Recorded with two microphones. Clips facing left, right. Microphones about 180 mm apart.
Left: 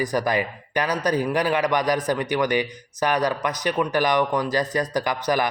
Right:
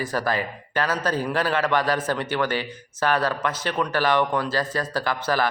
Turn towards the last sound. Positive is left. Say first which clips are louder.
# left 1 dB
turn(degrees=15)  # may be behind; listen again after turning